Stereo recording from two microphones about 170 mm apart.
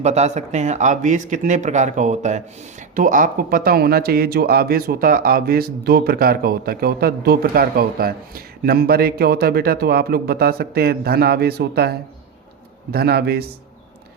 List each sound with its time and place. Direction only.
0.0 s a man's voice: 40° right (ahead or behind); by 13.4 s 65° right (ahead or behind)